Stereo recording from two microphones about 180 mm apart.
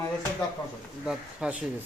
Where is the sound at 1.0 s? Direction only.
5° right (ahead or behind).